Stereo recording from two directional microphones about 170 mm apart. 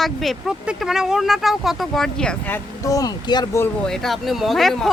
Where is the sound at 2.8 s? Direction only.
20° left (ahead or behind).